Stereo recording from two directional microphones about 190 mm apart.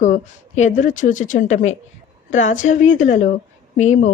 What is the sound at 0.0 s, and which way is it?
A woman's voice, 40° left (ahead or behind).